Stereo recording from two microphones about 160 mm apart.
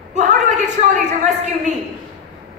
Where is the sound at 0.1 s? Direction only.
45° right (ahead or behind).